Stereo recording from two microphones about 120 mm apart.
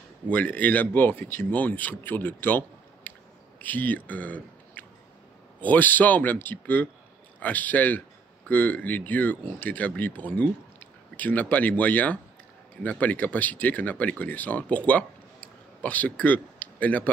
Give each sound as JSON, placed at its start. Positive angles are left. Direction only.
{"t": 0.3, "sound": "speech", "side_deg": 15}
{"t": 15.8, "sound": "speech", "side_deg": 15}